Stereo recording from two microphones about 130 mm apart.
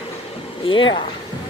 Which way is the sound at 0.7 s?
40° left (ahead or behind).